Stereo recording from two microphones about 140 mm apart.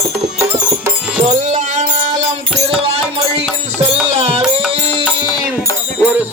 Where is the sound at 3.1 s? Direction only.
45° right (ahead or behind).